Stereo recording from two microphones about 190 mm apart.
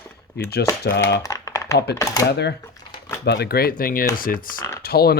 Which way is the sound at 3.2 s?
60° left (ahead or behind).